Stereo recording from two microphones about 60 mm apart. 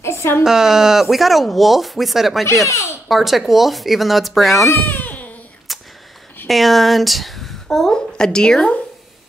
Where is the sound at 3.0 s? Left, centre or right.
Centre.